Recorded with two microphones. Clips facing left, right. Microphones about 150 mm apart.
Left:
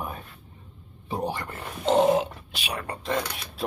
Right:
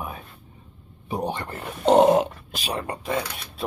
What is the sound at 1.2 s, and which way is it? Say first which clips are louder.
Speech: right 1 dB; 20° right (ahead or behind).